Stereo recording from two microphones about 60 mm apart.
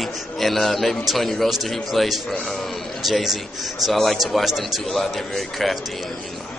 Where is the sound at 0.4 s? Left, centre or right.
Centre.